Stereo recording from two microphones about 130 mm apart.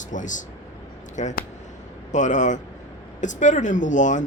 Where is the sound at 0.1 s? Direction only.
75° left (ahead or behind).